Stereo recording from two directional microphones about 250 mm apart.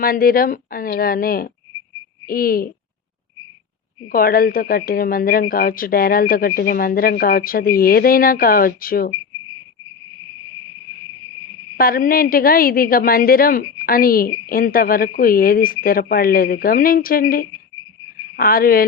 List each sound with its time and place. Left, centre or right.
0.0 s speech: left
4.1 s speech: left
11.8 s speech: left